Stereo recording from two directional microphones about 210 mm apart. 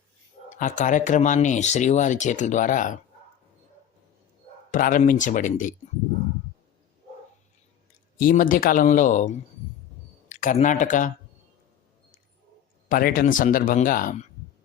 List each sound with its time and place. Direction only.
0.6 s speech: 35° left (ahead or behind)
4.7 s speech: 40° left (ahead or behind)
8.2 s speech: 40° left (ahead or behind)
12.9 s speech: 45° left (ahead or behind)